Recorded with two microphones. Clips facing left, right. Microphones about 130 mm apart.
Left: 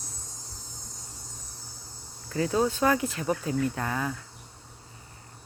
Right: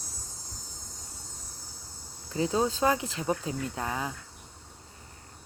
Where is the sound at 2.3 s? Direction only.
20° right (ahead or behind).